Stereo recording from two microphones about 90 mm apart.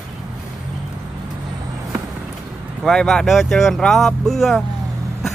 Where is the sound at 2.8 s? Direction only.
5° left (ahead or behind).